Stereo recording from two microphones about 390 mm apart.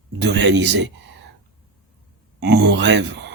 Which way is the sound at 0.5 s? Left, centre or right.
Right.